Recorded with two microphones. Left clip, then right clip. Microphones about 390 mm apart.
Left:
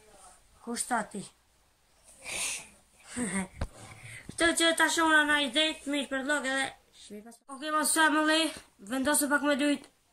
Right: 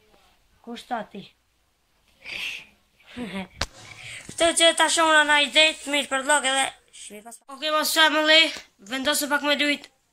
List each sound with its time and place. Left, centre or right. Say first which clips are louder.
0.7 s speech: right 1 dB; centre
2.2 s vehicle: right 5 dB; centre
3.1 s speech: right 1 dB; centre
3.5 s a sound: right 12 dB; right
4.4 s speech: right 7 dB; centre
6.6 s a sound: right 8 dB; right
7.4 s speech: right 6 dB; centre
9.1 s speech: right 3 dB; centre
9.4 s speech: right 6 dB; centre